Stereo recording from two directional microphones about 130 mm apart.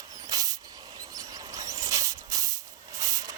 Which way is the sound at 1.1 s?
25° right (ahead or behind).